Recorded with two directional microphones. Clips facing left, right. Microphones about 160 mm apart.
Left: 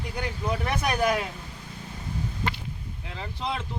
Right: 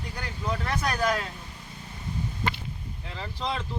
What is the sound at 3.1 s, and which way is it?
Speech, 10° left (ahead or behind).